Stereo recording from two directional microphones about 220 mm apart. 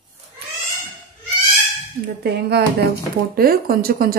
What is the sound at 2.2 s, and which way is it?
Speech, 45° right (ahead or behind).